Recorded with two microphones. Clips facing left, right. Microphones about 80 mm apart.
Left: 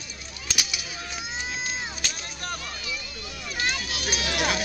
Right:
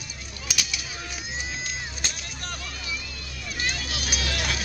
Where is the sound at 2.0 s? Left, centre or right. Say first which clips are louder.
Even; right.